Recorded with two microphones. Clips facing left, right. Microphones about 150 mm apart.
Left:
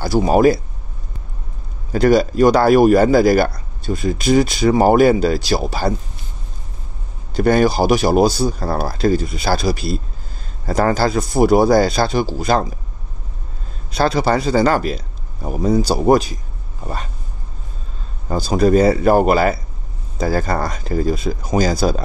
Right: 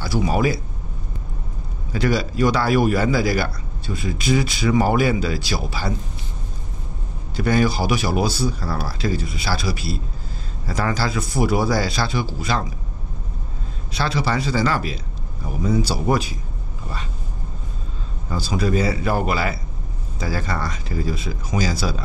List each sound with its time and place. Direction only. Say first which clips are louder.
0.0 s a man's voice: left 8 dB; 45° left (ahead or behind)
1.9 s a man's voice: left 8 dB; 45° left (ahead or behind)
7.3 s a man's voice: left 5 dB; 50° left (ahead or behind)
13.9 s a man's voice: left 6 dB; 45° left (ahead or behind)
18.3 s a man's voice: left 8 dB; 45° left (ahead or behind)